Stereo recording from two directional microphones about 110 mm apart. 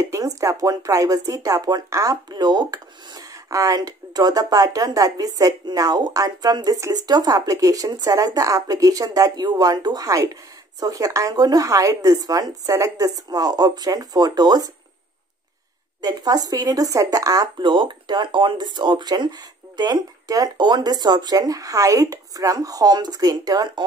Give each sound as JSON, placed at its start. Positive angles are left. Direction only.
{"t": 0.0, "sound": "speech", "side_deg": -30}
{"t": 16.0, "sound": "speech", "side_deg": -35}
{"t": 17.6, "sound": "speech", "side_deg": -45}